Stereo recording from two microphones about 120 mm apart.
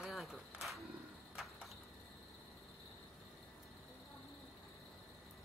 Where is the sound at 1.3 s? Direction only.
5° right (ahead or behind).